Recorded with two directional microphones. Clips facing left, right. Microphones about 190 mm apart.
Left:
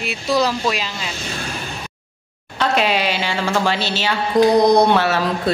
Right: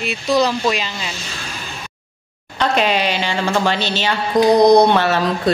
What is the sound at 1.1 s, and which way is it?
Speech, 55° left (ahead or behind).